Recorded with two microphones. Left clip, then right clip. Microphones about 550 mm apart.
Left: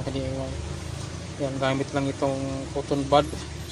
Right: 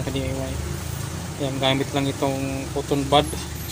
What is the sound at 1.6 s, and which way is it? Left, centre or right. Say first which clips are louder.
Speech: right 4 dB; left.